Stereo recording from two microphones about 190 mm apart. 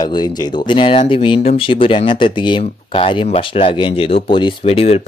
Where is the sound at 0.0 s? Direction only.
20° left (ahead or behind).